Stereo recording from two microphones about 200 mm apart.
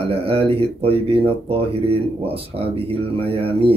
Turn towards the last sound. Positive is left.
turn(degrees=-30)  # may be behind; listen again after turning